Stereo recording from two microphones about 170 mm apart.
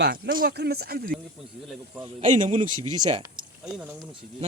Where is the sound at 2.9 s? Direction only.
25° right (ahead or behind).